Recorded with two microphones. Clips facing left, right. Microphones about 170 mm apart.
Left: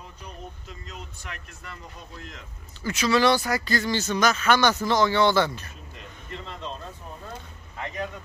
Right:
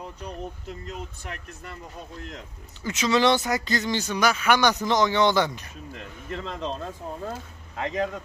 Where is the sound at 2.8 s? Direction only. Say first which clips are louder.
Even; 20° right (ahead or behind).